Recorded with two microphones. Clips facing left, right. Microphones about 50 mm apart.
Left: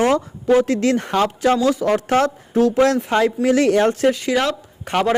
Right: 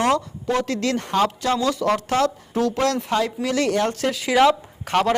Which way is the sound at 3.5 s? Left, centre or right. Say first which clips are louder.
Left 7 dB; left.